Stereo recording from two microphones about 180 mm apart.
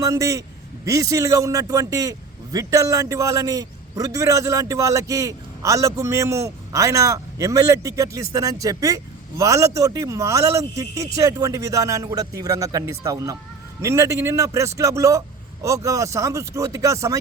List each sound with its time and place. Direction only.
0.0 s a man's voice: 20° right (ahead or behind)